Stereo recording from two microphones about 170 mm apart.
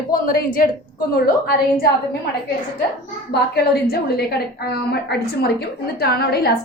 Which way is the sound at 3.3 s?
70° left (ahead or behind).